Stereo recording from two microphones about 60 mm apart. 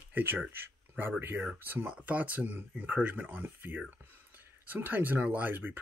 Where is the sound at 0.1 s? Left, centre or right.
Right.